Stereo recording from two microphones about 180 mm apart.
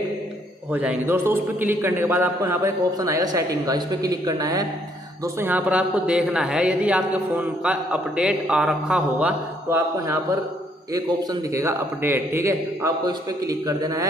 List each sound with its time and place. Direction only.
0.7 s a man's voice: 10° right (ahead or behind)